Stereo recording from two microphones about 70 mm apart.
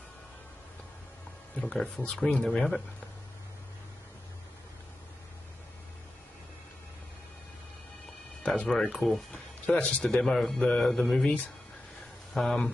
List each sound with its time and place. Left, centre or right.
1.6 s speech: centre
8.6 s speech: centre
9.8 s speech: centre
10.0 s a man's voice: centre
12.4 s a man's voice: centre